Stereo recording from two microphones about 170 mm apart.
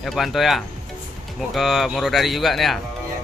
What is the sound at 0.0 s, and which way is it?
Speech, centre (ahead or behind).